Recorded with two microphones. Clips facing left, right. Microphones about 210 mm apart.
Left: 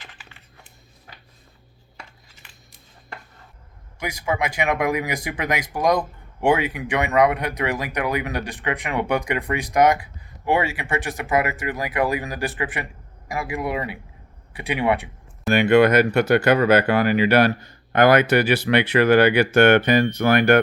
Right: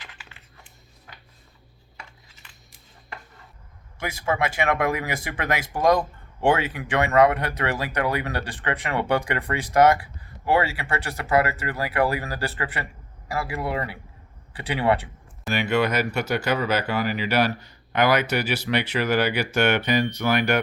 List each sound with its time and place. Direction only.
4.0 s speech: 15° left (ahead or behind)
15.5 s speech: 55° left (ahead or behind)